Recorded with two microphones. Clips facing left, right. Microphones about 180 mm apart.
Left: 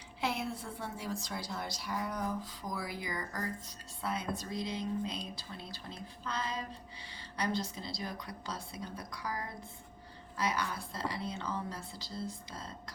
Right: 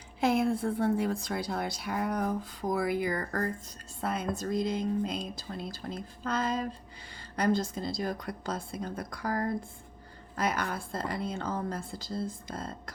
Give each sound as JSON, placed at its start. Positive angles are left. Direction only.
{"t": 0.2, "sound": "a woman's voice", "side_deg": -50}